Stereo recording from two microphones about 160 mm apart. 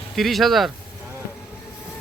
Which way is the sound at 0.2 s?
Centre (ahead or behind).